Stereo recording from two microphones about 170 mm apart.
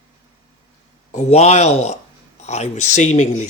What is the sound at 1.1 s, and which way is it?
Speech, 40° left (ahead or behind).